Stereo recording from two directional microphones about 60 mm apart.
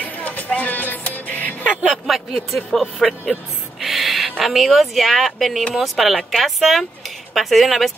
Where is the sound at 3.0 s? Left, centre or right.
Centre.